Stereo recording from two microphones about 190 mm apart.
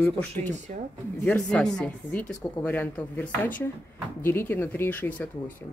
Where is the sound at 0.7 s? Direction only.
40° right (ahead or behind).